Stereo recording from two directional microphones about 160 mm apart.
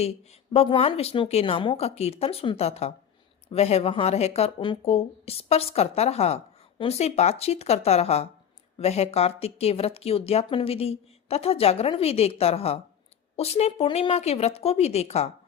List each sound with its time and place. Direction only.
0.5 s speech: 35° left (ahead or behind)